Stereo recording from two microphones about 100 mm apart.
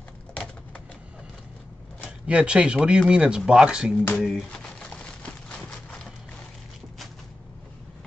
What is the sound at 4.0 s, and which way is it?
Speech, 20° left (ahead or behind).